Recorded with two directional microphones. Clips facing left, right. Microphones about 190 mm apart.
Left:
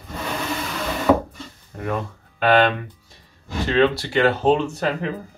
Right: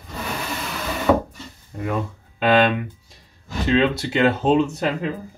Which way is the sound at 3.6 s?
20° right (ahead or behind).